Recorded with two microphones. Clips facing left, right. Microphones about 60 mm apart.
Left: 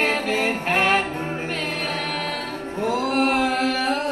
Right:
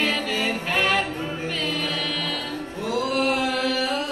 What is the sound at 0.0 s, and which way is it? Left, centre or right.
Music, left.